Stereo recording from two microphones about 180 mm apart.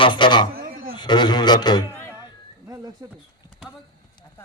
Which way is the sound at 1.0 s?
25° left (ahead or behind).